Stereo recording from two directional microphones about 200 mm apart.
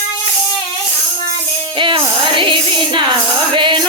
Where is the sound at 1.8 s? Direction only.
25° right (ahead or behind).